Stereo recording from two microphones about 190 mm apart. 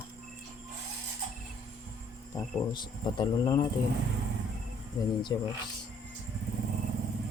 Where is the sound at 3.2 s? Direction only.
25° left (ahead or behind).